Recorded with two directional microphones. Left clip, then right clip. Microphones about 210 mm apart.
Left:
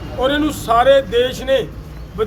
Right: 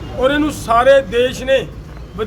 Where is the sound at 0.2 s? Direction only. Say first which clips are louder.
Right 2 dB; centre (ahead or behind).